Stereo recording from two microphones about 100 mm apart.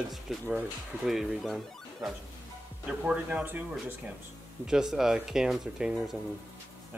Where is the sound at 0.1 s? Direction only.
Centre (ahead or behind).